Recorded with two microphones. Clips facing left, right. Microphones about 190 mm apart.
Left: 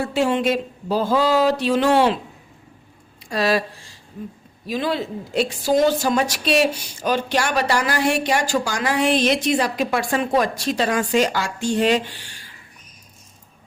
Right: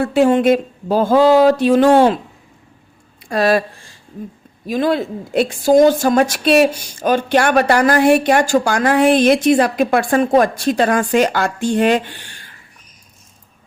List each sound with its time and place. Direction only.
0.0 s a woman's voice: 50° right (ahead or behind)
3.2 s a woman's voice: 50° right (ahead or behind)